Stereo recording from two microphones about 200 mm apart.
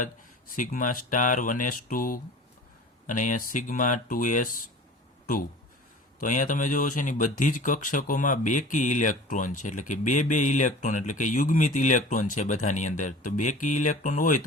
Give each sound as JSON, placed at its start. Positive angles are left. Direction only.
{"t": 0.5, "sound": "speech", "side_deg": 40}
{"t": 6.1, "sound": "speech", "side_deg": 40}